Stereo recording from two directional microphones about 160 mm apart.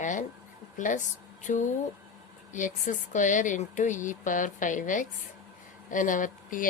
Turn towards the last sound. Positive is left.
turn(degrees=55)  # may be behind; listen again after turning